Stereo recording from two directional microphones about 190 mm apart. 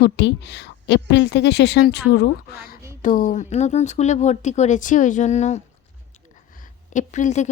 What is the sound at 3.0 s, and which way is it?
Speech, 45° left (ahead or behind).